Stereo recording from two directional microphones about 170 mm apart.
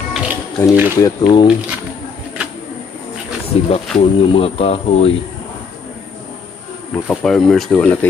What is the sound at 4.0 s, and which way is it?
Speech, 35° left (ahead or behind).